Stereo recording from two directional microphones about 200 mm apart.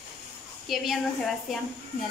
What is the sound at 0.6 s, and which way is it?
Speech, centre (ahead or behind).